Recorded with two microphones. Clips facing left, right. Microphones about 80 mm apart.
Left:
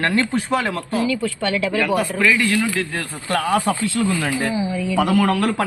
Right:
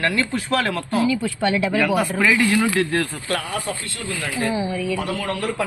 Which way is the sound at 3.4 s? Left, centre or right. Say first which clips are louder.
Left 9 dB; left.